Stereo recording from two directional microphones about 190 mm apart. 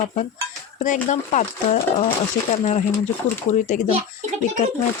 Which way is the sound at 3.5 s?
40° left (ahead or behind).